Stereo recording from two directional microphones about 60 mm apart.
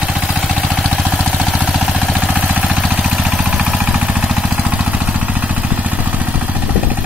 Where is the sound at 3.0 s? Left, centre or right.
Centre.